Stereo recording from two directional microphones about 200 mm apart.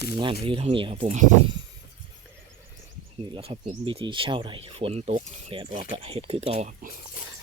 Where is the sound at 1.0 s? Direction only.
40° right (ahead or behind).